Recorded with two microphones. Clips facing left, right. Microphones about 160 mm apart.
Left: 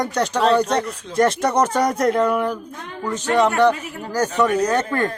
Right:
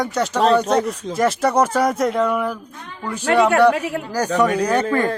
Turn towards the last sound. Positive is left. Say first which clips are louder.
# right 2 dB
turn(degrees=-10)  # may be behind; listen again after turning